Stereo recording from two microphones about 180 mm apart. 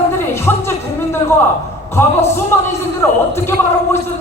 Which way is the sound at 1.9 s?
15° left (ahead or behind).